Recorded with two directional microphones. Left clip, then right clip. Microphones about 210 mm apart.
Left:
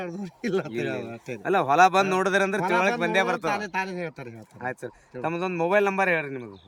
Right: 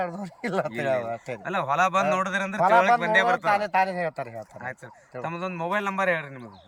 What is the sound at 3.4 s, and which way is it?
Speech, 10° right (ahead or behind).